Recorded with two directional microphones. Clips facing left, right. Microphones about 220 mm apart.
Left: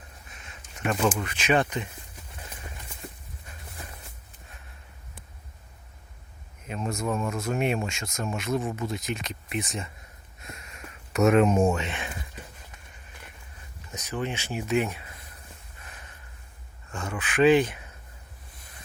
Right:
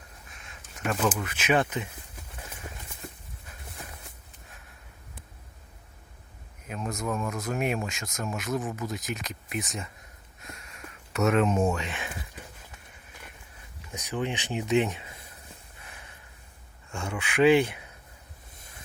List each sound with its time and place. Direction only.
0.3 s a sound: centre (ahead or behind)
1.2 s speech: 5° right (ahead or behind)
6.7 s speech: centre (ahead or behind)
11.1 s speech: 10° left (ahead or behind)
13.9 s speech: 15° right (ahead or behind)
15.8 s a sound: 10° right (ahead or behind)
16.9 s speech: 10° right (ahead or behind)